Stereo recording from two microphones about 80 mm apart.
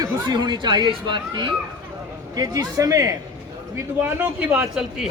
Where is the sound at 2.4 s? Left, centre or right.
Right.